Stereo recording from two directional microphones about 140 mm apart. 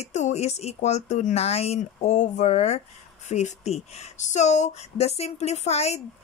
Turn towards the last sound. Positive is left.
turn(degrees=50)  # may be behind; listen again after turning